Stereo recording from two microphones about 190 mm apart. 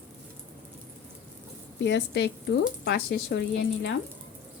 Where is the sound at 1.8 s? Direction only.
65° left (ahead or behind).